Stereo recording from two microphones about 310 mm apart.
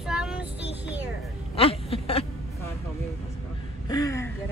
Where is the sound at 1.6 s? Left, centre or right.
Centre.